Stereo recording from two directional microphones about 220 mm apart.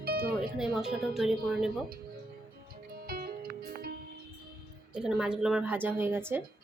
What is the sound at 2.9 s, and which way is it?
Music, 45° right (ahead or behind).